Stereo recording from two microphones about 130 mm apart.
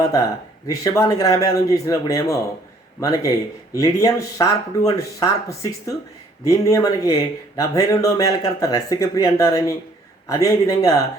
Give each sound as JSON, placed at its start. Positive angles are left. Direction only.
{"t": 0.0, "sound": "a man's voice", "side_deg": 25}